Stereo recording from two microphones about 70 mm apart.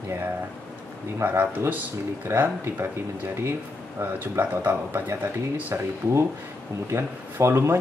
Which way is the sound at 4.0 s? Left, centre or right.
Right.